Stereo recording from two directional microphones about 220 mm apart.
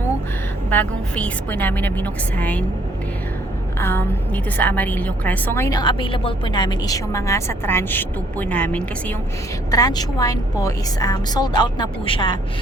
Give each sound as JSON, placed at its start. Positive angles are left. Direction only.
{"t": 0.7, "sound": "a woman's voice", "side_deg": 5}
{"t": 3.8, "sound": "a woman's voice", "side_deg": 10}
{"t": 9.7, "sound": "a woman's voice", "side_deg": 15}